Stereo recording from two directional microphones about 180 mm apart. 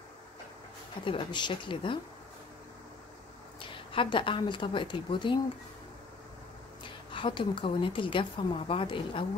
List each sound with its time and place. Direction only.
1.0 s a woman's voice: 25° left (ahead or behind)
3.7 s a woman's voice: 30° left (ahead or behind)
6.8 s a woman's voice: 30° left (ahead or behind)